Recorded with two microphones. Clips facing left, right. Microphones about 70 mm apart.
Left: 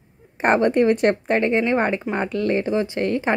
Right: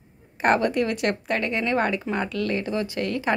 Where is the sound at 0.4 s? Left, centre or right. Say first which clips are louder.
Left 4 dB; left.